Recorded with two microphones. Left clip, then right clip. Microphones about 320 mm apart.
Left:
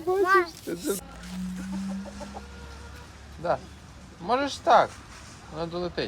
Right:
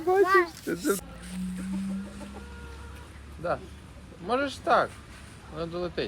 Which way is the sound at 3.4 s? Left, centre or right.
Left.